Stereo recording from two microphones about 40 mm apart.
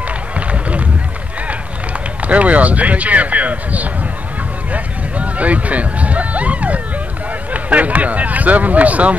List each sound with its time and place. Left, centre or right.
0.5 s run: right
2.2 s speech: right
4.7 s a sound: right
7.5 s speech: right